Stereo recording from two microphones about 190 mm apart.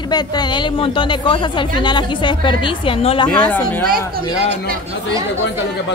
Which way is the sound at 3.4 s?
10° left (ahead or behind).